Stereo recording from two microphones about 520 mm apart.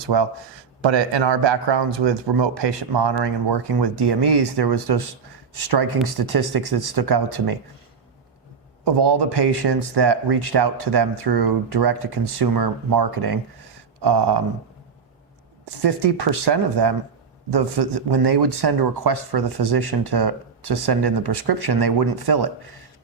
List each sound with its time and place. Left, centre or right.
0.0 s speech: right
8.8 s speech: right
15.8 s speech: right